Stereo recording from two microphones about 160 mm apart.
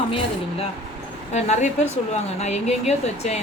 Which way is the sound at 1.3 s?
45° left (ahead or behind).